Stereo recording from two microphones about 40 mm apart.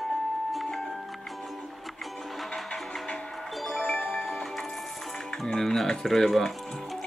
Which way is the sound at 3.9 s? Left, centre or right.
Left.